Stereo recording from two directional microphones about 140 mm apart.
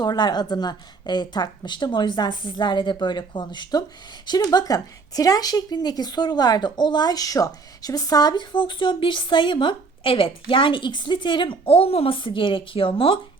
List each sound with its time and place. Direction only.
0.0 s speech: 30° left (ahead or behind)